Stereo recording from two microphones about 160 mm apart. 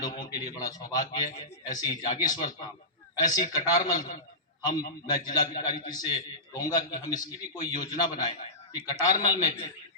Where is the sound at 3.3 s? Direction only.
25° left (ahead or behind).